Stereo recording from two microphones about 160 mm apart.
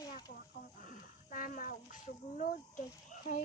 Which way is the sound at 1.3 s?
55° left (ahead or behind).